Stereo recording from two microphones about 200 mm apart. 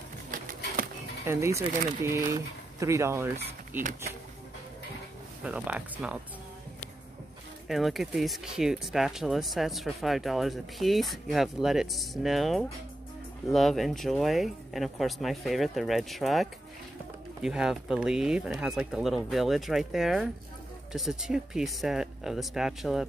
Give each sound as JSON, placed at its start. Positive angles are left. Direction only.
{"t": 1.2, "sound": "speech", "side_deg": -15}
{"t": 5.4, "sound": "speech", "side_deg": -5}
{"t": 7.6, "sound": "speech", "side_deg": 0}